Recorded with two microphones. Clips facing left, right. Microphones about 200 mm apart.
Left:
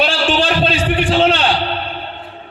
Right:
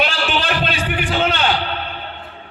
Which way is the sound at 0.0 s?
30° left (ahead or behind).